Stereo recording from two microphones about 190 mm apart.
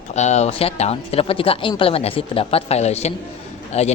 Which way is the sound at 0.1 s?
35° left (ahead or behind).